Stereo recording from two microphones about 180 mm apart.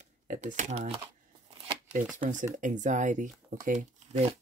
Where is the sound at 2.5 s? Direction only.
45° right (ahead or behind).